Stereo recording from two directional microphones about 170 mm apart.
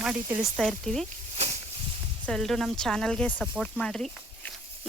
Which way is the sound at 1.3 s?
40° right (ahead or behind).